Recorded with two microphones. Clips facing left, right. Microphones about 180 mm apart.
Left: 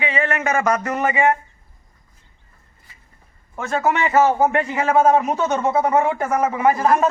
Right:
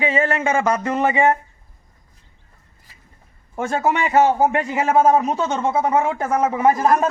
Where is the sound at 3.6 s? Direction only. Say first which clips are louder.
Even; 10° right (ahead or behind).